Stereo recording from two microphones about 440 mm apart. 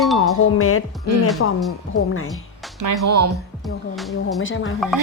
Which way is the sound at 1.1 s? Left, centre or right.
Right.